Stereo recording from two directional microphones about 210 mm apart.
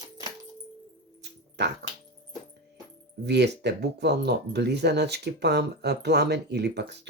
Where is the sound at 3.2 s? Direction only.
55° right (ahead or behind).